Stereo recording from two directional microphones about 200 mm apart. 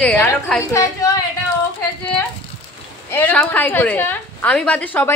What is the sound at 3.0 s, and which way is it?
A woman's voice, 10° left (ahead or behind).